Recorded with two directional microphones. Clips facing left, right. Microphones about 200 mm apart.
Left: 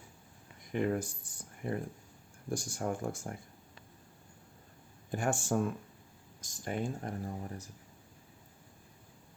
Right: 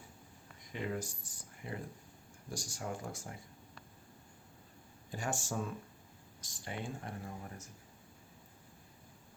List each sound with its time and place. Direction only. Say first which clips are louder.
0.7 s speech: left 7 dB; 55° left (ahead or behind)
5.1 s speech: left 7 dB; 55° left (ahead or behind)
6.7 s speech: left 6 dB; 45° left (ahead or behind)